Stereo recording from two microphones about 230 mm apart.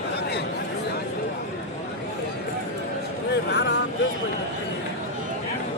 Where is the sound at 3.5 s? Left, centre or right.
Left.